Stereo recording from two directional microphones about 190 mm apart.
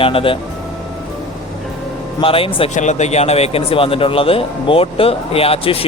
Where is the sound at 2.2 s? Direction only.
30° left (ahead or behind).